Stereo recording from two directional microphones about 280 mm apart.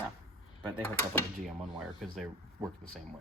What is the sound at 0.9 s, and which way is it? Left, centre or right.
Speech, centre.